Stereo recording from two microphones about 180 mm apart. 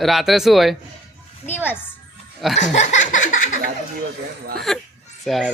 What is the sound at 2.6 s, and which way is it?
Speech, 40° left (ahead or behind).